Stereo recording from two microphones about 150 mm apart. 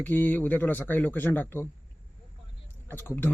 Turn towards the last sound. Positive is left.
turn(degrees=15)  # may be behind; listen again after turning